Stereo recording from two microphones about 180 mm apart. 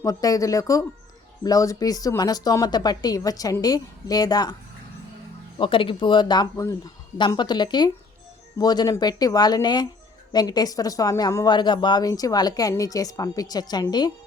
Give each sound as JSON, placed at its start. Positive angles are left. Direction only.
{"t": 0.0, "sound": "a woman's voice", "side_deg": 20}
{"t": 5.5, "sound": "a woman's voice", "side_deg": 30}